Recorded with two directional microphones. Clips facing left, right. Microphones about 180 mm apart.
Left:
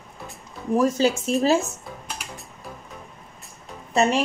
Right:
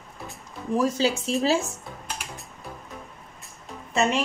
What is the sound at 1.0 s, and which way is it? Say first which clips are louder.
Speech: left 3 dB; 50° left (ahead or behind).